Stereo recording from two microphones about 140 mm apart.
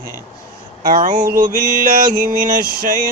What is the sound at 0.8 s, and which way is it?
Speech, 80° right.